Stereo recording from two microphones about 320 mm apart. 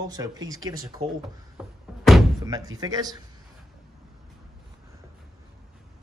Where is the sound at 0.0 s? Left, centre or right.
Centre.